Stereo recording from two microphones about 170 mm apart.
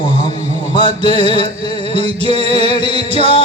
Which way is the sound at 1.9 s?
30° left (ahead or behind).